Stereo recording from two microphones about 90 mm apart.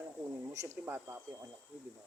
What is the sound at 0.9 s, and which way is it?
Speech, 25° right (ahead or behind).